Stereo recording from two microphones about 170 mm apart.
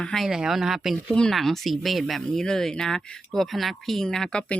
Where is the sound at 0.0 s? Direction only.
Centre (ahead or behind).